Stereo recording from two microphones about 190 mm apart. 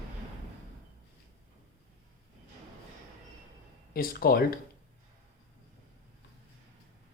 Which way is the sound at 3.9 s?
50° left (ahead or behind).